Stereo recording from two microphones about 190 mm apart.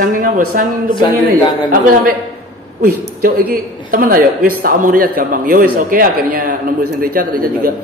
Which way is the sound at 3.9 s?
45° right (ahead or behind).